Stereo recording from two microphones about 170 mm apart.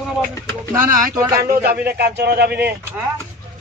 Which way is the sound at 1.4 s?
60° right (ahead or behind).